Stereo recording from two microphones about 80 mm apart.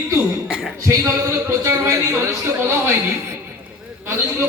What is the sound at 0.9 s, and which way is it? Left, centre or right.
Speech, right.